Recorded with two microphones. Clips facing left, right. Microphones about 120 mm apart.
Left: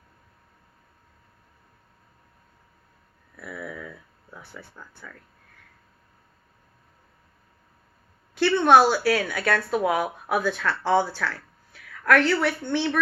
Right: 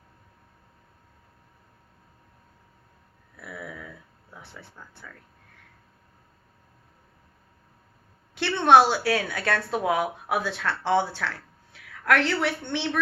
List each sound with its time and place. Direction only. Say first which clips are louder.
8.4 s speech: left 1 dB; 25° right (ahead or behind)